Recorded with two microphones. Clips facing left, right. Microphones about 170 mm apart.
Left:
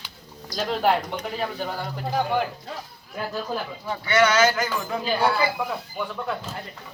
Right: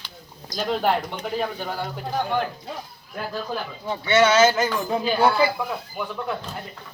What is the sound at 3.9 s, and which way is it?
Speech, 25° right (ahead or behind).